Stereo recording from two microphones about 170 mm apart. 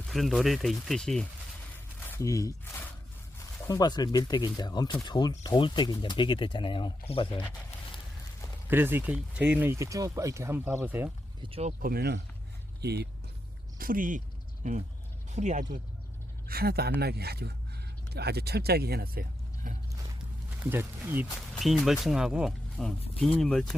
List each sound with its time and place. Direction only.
0.1 s speech: centre (ahead or behind)
2.0 s a sound: 15° left (ahead or behind)
3.3 s speech: 20° left (ahead or behind)
8.7 s speech: 10° right (ahead or behind)
11.4 s speech: 35° right (ahead or behind)
11.8 s speech: 65° right (ahead or behind)
13.7 s speech: 55° right (ahead or behind)
16.5 s speech: 65° right (ahead or behind)
20.7 s speech: 15° right (ahead or behind)
21.5 s speech: centre (ahead or behind)